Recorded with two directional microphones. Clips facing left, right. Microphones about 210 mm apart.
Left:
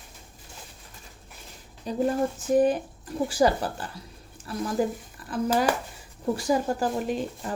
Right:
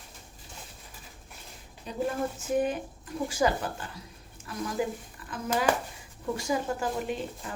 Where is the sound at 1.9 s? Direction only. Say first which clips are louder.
Left 7 dB; 35° left (ahead or behind).